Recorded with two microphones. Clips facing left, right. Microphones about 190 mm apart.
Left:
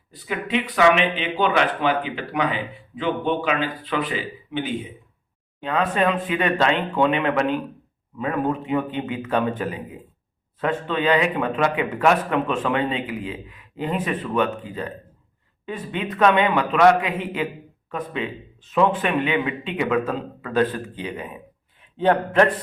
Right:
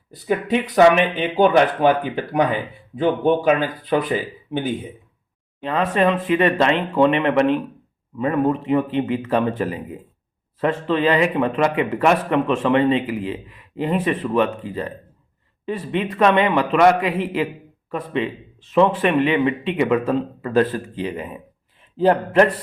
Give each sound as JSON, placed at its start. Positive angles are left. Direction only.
{"t": 0.3, "sound": "speech", "side_deg": -45}
{"t": 5.6, "sound": "a man's voice", "side_deg": 0}
{"t": 18.7, "sound": "a man's voice", "side_deg": 0}